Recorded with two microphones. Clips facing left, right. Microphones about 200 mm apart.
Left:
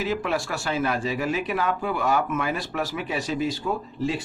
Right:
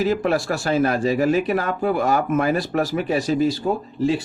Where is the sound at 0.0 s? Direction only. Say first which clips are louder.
Right 6 dB; 40° right (ahead or behind).